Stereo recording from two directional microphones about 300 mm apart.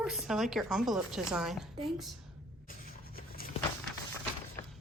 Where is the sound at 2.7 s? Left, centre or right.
Left.